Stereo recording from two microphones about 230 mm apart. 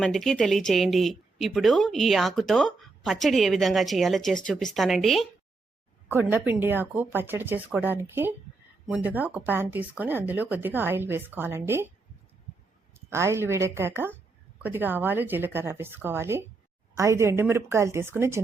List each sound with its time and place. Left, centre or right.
0.0 s speech: centre
12.9 s speech: centre